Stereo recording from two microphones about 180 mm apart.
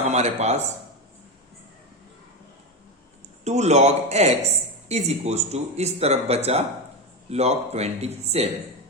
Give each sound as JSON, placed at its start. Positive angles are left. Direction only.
{"t": 0.0, "sound": "speech", "side_deg": -40}
{"t": 3.4, "sound": "speech", "side_deg": -40}